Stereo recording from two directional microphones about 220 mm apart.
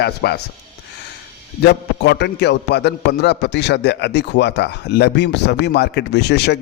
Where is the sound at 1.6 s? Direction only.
50° left (ahead or behind).